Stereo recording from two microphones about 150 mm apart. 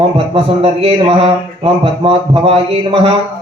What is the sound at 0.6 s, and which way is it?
Speech, 35° right (ahead or behind).